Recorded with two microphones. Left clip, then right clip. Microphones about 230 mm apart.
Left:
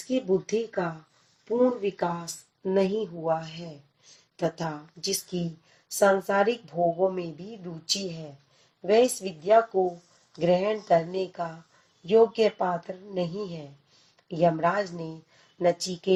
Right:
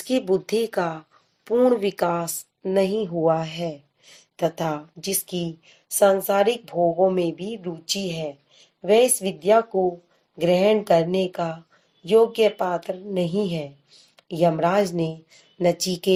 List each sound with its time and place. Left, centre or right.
0.1 s a woman's voice: right